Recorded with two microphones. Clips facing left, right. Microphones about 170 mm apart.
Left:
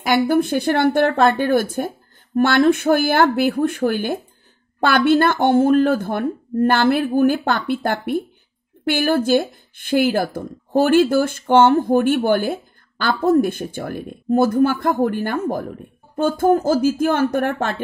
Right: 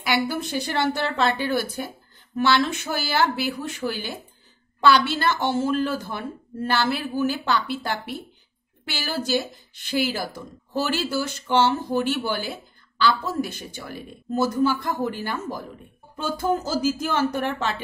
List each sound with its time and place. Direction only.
0.0 s speech: 50° left (ahead or behind)